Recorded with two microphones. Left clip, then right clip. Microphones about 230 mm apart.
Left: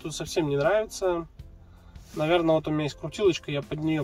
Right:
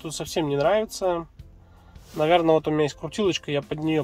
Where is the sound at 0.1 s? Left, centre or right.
Right.